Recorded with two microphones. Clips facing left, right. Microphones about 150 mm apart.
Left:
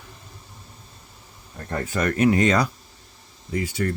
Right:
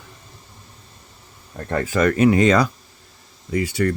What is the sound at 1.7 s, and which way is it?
Speech, 90° right.